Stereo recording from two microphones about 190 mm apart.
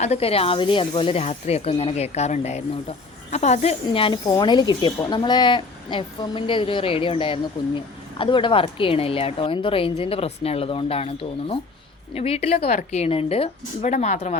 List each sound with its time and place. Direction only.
0.0 s speech: 35° left (ahead or behind)
3.8 s speech: 25° left (ahead or behind)